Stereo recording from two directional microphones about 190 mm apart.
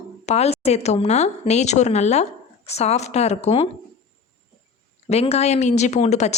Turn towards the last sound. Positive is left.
turn(degrees=35)  # may be behind; listen again after turning